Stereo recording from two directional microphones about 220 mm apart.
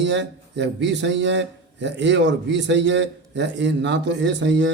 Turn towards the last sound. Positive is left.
turn(degrees=-55)  # may be behind; listen again after turning